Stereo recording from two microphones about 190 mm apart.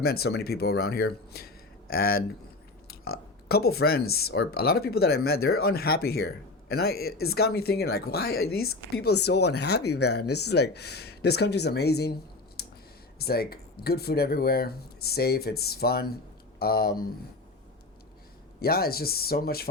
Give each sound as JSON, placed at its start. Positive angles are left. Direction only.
{"t": 0.0, "sound": "speech", "side_deg": 55}
{"t": 12.6, "sound": "clicking", "side_deg": 55}
{"t": 13.1, "sound": "speech", "side_deg": 55}
{"t": 18.6, "sound": "speech", "side_deg": 55}